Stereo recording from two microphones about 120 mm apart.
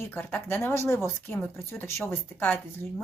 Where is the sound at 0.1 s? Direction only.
15° left (ahead or behind).